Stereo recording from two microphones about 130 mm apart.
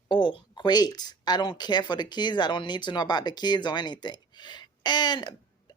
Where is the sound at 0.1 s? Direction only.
35° left (ahead or behind).